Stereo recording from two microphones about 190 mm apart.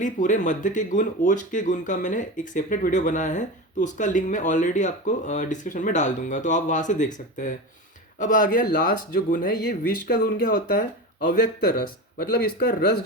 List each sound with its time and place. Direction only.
0.0 s speech: 40° left (ahead or behind)
12.1 s speech: 50° left (ahead or behind)